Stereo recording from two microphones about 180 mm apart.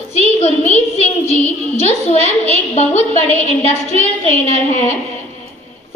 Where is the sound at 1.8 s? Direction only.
35° left (ahead or behind).